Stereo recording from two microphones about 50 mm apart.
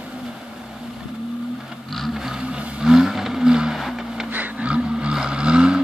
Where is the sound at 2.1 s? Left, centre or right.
Centre.